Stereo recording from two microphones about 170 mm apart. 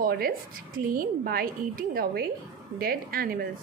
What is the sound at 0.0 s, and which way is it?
A woman's voice, 60° right (ahead or behind).